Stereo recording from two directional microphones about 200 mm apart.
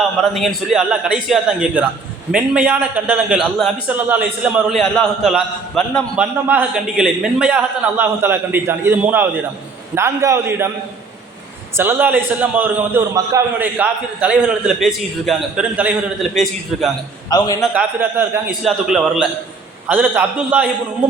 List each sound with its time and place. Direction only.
0.2 s a man's voice: centre (ahead or behind)
11.8 s a man's voice: 10° right (ahead or behind)
17.2 s a man's voice: 20° left (ahead or behind)
17.7 s a man's voice: 10° right (ahead or behind)